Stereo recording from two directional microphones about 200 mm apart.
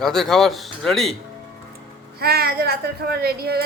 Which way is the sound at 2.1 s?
50° right (ahead or behind).